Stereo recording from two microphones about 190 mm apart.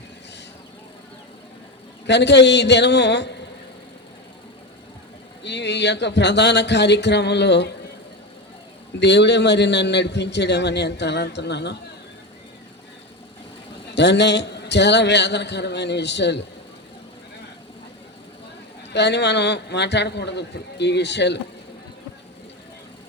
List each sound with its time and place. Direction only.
2.0 s a man's voice: 65° left (ahead or behind)
5.4 s a man's voice: 65° left (ahead or behind)
9.0 s a man's voice: 65° left (ahead or behind)
13.9 s a man's voice: 65° left (ahead or behind)
18.9 s a man's voice: 65° left (ahead or behind)